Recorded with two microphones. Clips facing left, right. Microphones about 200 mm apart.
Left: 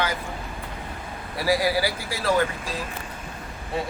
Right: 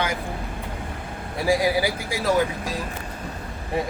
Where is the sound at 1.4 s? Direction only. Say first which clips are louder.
Right 2 dB; 10° right (ahead or behind).